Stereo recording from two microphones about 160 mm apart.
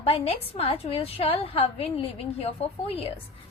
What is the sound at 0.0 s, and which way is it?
A woman's voice, 40° left (ahead or behind).